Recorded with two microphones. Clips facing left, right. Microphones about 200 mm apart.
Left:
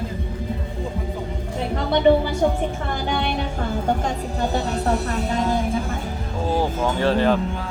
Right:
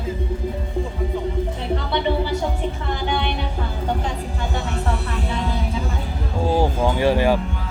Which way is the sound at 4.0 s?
40° left (ahead or behind).